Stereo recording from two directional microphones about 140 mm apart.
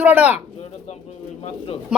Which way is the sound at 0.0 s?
15° right (ahead or behind).